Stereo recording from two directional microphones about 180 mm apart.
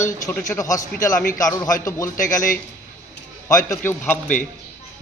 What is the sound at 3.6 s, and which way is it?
Speech, 10° left (ahead or behind).